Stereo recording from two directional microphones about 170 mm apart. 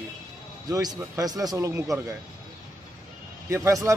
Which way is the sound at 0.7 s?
20° right (ahead or behind).